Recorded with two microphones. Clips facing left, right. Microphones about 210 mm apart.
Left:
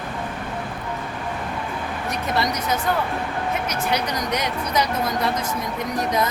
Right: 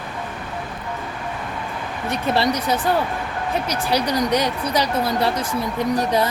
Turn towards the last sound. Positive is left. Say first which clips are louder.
# right 4 dB
turn(degrees=-30)  # may be behind; listen again after turning